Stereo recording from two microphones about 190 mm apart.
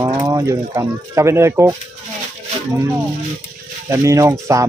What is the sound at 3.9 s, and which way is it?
Speech, 15° right (ahead or behind).